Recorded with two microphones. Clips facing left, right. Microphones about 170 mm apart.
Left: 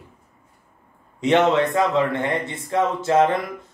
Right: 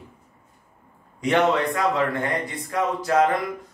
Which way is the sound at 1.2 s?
25° left (ahead or behind).